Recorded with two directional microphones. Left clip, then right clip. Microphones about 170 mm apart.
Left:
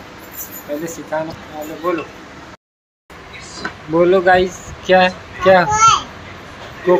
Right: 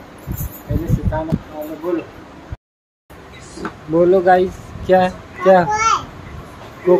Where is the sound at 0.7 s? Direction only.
10° left (ahead or behind).